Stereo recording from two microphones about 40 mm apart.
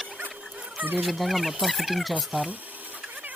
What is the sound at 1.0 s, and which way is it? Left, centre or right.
Speech, centre.